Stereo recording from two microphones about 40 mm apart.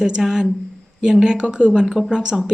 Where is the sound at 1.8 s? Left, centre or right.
Centre.